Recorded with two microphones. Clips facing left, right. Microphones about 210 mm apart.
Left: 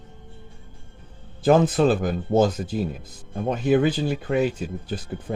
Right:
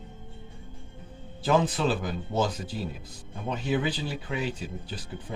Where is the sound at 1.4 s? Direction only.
50° left (ahead or behind).